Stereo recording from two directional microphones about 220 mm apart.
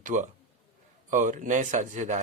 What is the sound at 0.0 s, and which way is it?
A man's voice, 35° right (ahead or behind).